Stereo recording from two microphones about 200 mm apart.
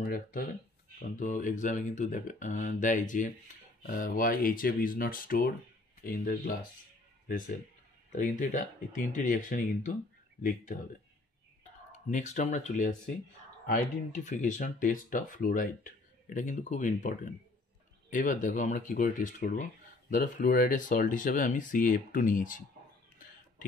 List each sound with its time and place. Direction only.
0.0 s speech: 45° left (ahead or behind)
11.9 s speech: 35° left (ahead or behind)